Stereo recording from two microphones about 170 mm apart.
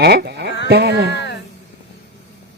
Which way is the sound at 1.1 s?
90° left.